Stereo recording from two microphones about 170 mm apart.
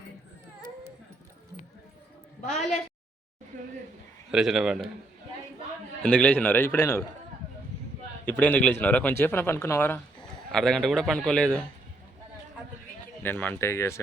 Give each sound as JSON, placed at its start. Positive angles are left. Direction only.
{"t": 3.5, "sound": "a sound", "side_deg": -50}
{"t": 4.3, "sound": "a man's voice", "side_deg": -5}
{"t": 6.0, "sound": "speech", "side_deg": 5}
{"t": 8.3, "sound": "speech", "side_deg": 10}
{"t": 13.2, "sound": "speech", "side_deg": 10}